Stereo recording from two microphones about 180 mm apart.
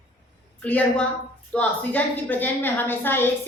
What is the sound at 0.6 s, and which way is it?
A woman's voice, 10° left (ahead or behind).